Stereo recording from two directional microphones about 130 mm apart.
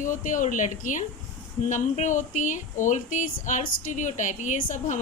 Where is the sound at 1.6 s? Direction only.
70° left (ahead or behind).